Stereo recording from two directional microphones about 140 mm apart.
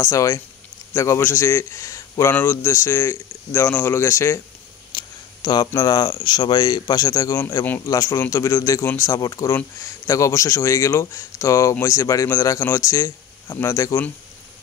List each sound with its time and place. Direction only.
0.0 s a man's voice: 25° left (ahead or behind)
4.9 s a sound: 30° left (ahead or behind)
5.7 s a man's voice: 30° left (ahead or behind)